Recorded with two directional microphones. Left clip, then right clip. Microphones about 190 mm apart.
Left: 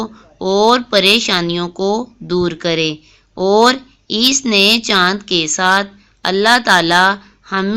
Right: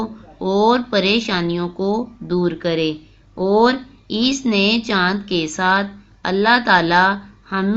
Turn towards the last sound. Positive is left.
turn(degrees=40)  # may be behind; listen again after turning